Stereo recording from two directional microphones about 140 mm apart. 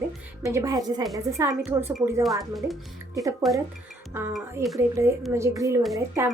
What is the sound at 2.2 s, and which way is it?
Speech, centre (ahead or behind).